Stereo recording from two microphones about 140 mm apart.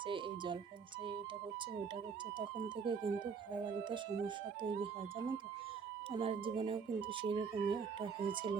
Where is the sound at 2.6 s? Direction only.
35° right (ahead or behind).